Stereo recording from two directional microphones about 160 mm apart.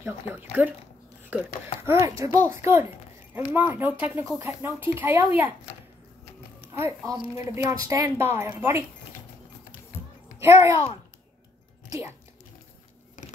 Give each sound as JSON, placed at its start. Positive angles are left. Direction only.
{"t": 0.0, "sound": "speech", "side_deg": -15}
{"t": 6.7, "sound": "speech", "side_deg": -15}
{"t": 10.4, "sound": "speech", "side_deg": -15}